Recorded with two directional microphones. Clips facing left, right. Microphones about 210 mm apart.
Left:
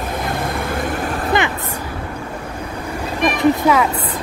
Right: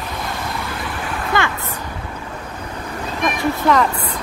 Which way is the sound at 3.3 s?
15° left (ahead or behind).